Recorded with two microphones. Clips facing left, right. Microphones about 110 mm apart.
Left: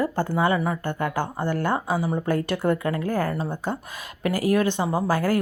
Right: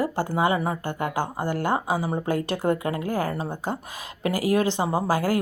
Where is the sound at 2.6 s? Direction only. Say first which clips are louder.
Left 1 dB; 20° right (ahead or behind).